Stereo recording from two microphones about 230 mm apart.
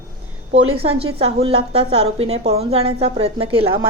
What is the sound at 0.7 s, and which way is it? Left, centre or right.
A woman's voice, right.